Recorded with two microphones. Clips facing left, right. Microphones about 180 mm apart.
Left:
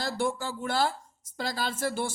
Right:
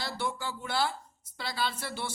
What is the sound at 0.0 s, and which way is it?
A man's voice, 45° left (ahead or behind).